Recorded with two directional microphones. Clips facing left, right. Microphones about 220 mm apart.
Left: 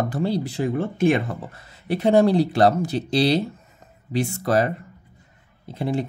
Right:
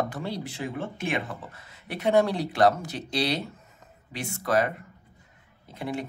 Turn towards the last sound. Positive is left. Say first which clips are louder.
# left 7 dB
turn(degrees=30)  # may be behind; listen again after turning